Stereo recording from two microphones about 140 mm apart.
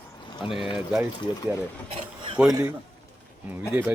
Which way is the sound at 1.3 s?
35° left (ahead or behind).